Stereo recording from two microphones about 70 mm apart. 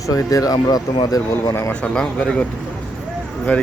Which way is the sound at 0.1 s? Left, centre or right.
Left.